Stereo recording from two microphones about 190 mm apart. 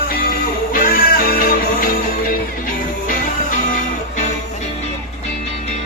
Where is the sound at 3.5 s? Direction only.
40° left (ahead or behind).